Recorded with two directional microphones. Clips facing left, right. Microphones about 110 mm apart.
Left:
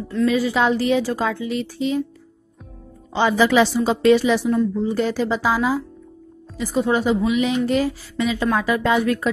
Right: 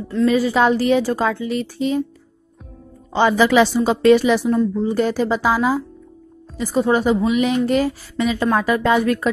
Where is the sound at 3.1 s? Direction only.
50° right (ahead or behind).